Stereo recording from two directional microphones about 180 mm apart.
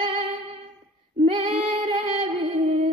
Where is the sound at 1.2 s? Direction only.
30° right (ahead or behind).